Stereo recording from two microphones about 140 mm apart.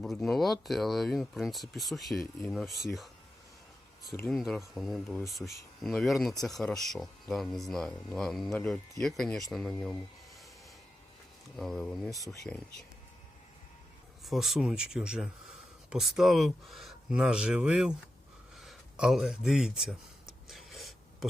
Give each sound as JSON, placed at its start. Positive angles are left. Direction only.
{"t": 0.0, "sound": "speech", "side_deg": 0}
{"t": 4.3, "sound": "speech", "side_deg": 0}
{"t": 11.5, "sound": "speech", "side_deg": 0}
{"t": 12.1, "sound": "speech", "side_deg": 25}
{"t": 14.3, "sound": "speech", "side_deg": 0}
{"t": 20.5, "sound": "a sound", "side_deg": 0}